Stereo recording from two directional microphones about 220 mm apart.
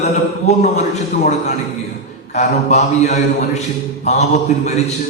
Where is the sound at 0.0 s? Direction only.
30° left (ahead or behind).